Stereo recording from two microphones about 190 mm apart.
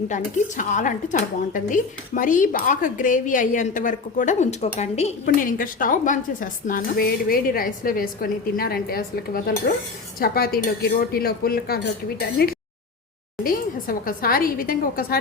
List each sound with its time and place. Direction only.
0.1 s speech: 40° left (ahead or behind)
5.2 s speech: 45° left (ahead or behind)
12.4 s a sound: 55° left (ahead or behind)
13.4 s a woman's voice: 50° left (ahead or behind)